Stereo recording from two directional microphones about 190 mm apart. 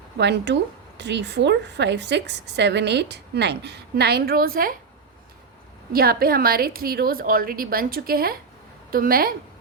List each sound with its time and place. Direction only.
0.2 s a woman's voice: 65° right (ahead or behind); by 4.8 s 50° right (ahead or behind)
5.9 s a woman's voice: 50° right (ahead or behind)